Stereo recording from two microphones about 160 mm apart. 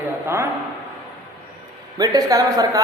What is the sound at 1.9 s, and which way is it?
Speech, 25° right (ahead or behind).